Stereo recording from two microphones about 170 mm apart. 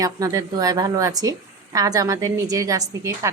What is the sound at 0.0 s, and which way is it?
A woman's voice, 20° right (ahead or behind).